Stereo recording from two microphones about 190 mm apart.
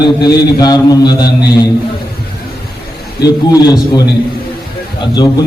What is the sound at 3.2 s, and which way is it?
A man's voice, 20° left (ahead or behind).